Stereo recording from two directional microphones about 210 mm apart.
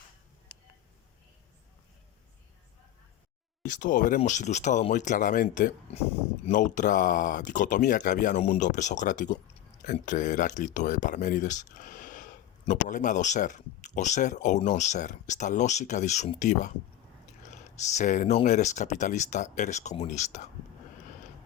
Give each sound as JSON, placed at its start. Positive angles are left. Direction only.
{"t": 3.7, "sound": "speech", "side_deg": 40}